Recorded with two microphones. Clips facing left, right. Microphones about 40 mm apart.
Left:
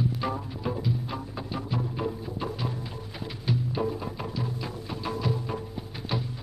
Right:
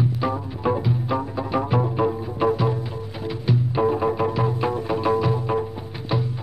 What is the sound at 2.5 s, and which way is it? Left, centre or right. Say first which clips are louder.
Music: right 10 dB; right.